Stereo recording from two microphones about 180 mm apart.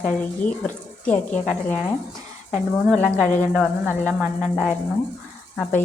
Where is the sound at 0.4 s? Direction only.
5° left (ahead or behind).